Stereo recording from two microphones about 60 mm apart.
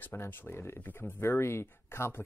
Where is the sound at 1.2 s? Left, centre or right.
Left.